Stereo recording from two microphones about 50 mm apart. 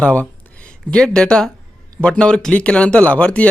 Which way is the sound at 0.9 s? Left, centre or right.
Centre.